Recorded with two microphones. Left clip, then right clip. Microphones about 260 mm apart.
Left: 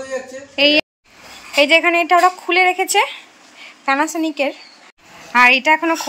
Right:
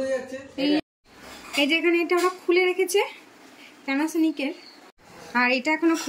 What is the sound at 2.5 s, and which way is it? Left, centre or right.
Speech, left.